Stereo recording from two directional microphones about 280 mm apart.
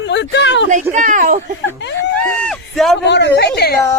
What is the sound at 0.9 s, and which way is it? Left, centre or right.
Speech, right.